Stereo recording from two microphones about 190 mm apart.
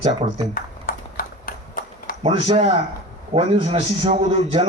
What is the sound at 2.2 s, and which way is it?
A man's voice, 30° right (ahead or behind).